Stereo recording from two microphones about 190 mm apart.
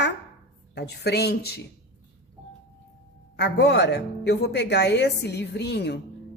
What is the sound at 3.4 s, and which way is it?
A woman's voice, 60° left (ahead or behind).